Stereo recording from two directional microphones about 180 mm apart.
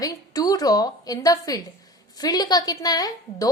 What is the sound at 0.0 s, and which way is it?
A woman's voice, 20° left (ahead or behind).